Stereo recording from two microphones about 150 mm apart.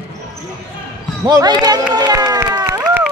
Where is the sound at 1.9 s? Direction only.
25° right (ahead or behind).